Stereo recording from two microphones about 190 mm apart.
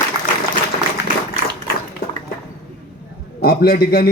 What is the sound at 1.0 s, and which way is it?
Tap, 65° left (ahead or behind).